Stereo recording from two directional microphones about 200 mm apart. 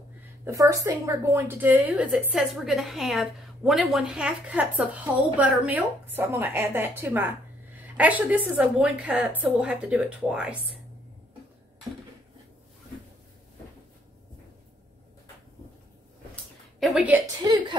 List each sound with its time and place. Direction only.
0.5 s a woman's voice: 15° right (ahead or behind)
16.8 s a woman's voice: 5° right (ahead or behind)
17.4 s a woman's voice: 25° right (ahead or behind)